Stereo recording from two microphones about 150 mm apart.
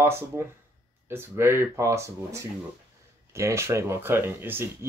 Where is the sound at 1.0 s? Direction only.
15° right (ahead or behind).